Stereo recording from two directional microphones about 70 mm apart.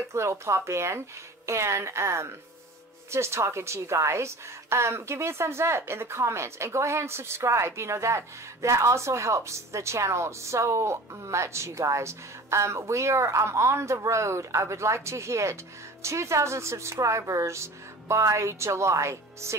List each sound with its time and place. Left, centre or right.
0.1 s a woman's voice: right